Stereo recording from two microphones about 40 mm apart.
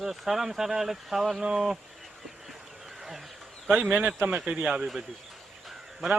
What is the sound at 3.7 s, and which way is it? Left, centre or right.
Speech, right.